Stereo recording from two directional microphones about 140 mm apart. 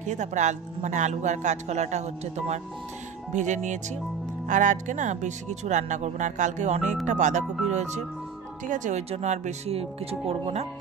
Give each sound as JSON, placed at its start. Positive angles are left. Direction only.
{"t": 0.0, "sound": "speech", "side_deg": -60}